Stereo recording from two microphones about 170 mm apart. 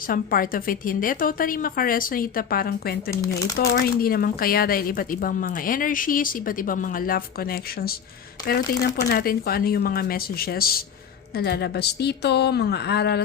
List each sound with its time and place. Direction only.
0.1 s a woman's voice: 55° left (ahead or behind); by 13.2 s 75° left (ahead or behind)